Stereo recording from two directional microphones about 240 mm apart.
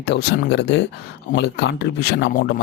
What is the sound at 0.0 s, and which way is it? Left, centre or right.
Speech, left.